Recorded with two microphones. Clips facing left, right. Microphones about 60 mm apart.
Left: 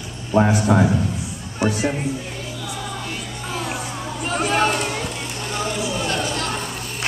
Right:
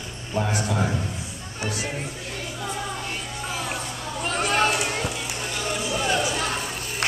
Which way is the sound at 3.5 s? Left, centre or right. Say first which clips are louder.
Left 4 dB; centre.